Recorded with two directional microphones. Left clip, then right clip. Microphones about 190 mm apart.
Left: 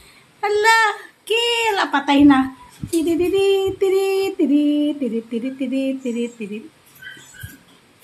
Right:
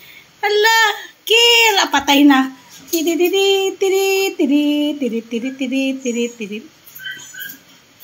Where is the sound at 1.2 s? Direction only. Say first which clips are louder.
Right 8 dB; centre (ahead or behind).